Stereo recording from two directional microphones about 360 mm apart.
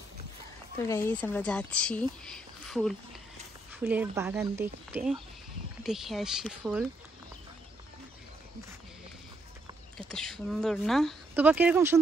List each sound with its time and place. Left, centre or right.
0.8 s speech: centre
10.1 s speech: centre